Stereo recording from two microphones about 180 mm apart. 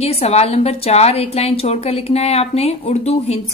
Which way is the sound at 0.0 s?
35° left (ahead or behind).